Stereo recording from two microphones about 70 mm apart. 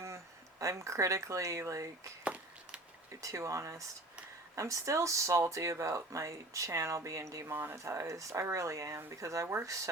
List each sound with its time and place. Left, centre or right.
0.6 s speech: right
2.2 s walk: right
3.2 s speech: right
7.5 s speech: right
7.9 s speech: right